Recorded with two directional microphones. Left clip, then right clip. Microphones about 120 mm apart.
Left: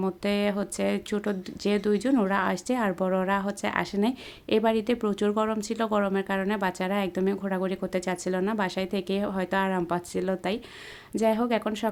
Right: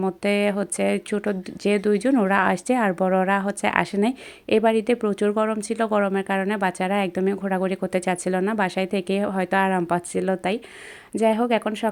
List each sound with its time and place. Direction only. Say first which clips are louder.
0.0 s speech: right 5 dB; 30° right (ahead or behind)